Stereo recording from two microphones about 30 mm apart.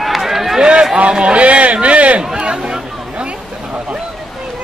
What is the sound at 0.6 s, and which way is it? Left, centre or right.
Run, right.